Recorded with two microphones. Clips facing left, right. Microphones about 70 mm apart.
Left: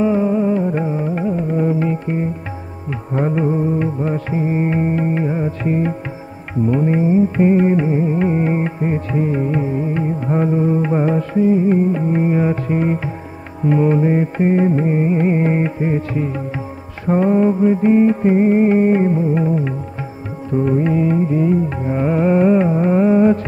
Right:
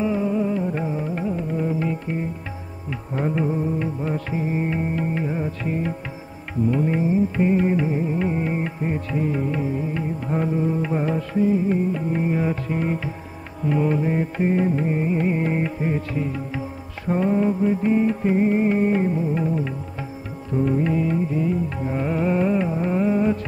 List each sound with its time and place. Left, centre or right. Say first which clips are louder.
0.0 s music: left 6 dB; left